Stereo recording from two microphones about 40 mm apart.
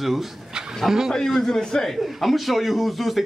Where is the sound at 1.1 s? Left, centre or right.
Centre.